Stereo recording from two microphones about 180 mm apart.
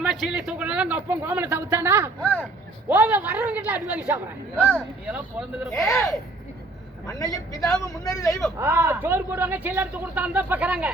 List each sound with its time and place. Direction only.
0.0 s speech: centre (ahead or behind)
2.2 s speech: 10° left (ahead or behind)
2.9 s speech: 10° right (ahead or behind)
5.9 s speech: 15° left (ahead or behind)
8.5 s speech: 10° right (ahead or behind)